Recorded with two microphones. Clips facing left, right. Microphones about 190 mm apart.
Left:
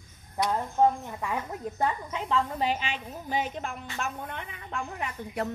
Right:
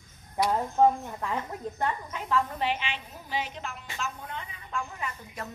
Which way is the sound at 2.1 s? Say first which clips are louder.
Even; 25° left (ahead or behind).